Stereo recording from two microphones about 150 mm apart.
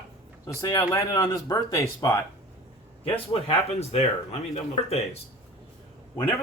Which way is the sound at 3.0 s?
45° left (ahead or behind).